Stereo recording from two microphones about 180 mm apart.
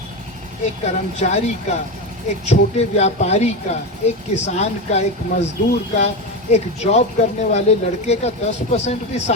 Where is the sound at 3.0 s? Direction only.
40° left (ahead or behind).